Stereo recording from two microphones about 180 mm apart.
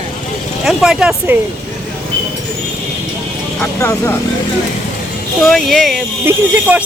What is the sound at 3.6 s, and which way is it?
Speech, 15° left (ahead or behind).